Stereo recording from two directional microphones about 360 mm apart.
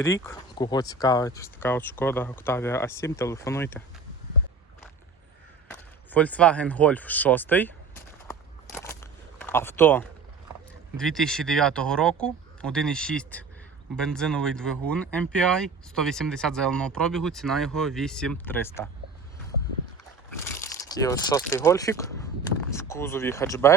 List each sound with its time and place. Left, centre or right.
0.0 s speech: centre
5.7 s a sound: centre
9.4 s speech: centre
20.4 s speech: centre